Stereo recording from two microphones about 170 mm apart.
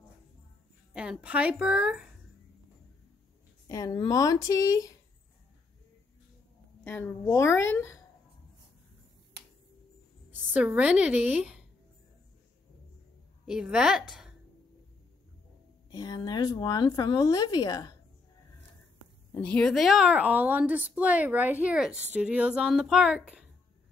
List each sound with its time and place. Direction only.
0.9 s a woman's voice: 5° right (ahead or behind)
3.6 s a woman's voice: 20° left (ahead or behind)
6.8 s a woman's voice: 10° left (ahead or behind)
10.5 s a woman's voice: 10° right (ahead or behind)
13.5 s a woman's voice: 5° right (ahead or behind)
15.9 s a woman's voice: 25° left (ahead or behind)
19.3 s a woman's voice: 10° left (ahead or behind)